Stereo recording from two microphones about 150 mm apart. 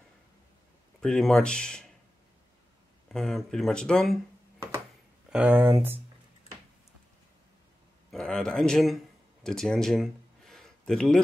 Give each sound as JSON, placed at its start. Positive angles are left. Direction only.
{"t": 1.0, "sound": "speech", "side_deg": 5}
{"t": 3.1, "sound": "speech", "side_deg": 0}
{"t": 4.6, "sound": "a sound", "side_deg": -15}
{"t": 5.3, "sound": "speech", "side_deg": -10}
{"t": 8.1, "sound": "speech", "side_deg": 5}